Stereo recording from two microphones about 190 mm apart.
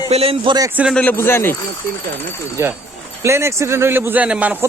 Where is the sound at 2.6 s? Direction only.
15° right (ahead or behind).